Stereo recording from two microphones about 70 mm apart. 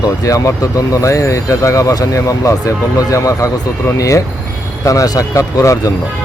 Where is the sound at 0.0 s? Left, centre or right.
Left.